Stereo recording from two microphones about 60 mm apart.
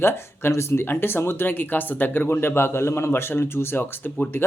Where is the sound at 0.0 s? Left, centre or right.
Left.